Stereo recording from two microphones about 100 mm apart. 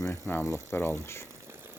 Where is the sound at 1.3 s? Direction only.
25° right (ahead or behind).